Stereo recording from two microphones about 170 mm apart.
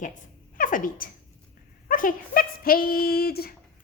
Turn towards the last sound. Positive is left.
turn(degrees=65)  # may be behind; listen again after turning